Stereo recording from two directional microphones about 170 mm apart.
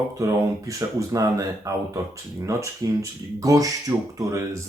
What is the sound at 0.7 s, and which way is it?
Speech, 20° right (ahead or behind).